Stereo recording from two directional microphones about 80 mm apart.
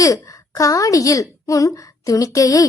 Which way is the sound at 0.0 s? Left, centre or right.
Left.